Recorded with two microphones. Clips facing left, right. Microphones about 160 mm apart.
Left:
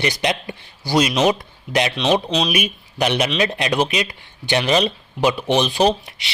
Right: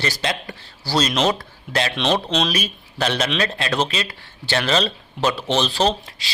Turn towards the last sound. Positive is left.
turn(degrees=20)  # may be behind; listen again after turning